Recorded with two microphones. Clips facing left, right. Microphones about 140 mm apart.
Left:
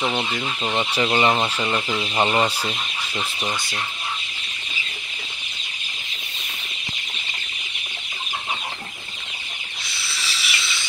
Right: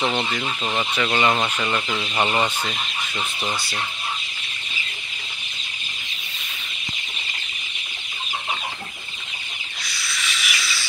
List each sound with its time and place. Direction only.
0.0 s speech: 5° left (ahead or behind)
0.7 s speech: 25° left (ahead or behind)
9.8 s a sound: 30° left (ahead or behind)